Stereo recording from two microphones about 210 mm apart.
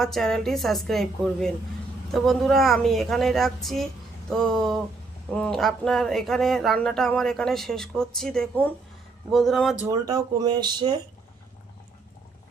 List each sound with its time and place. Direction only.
0.0 s speech: centre (ahead or behind)
9.8 s speech: 15° right (ahead or behind)